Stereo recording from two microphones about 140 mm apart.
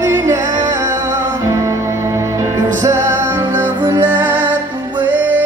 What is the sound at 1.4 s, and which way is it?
Music, 20° right (ahead or behind).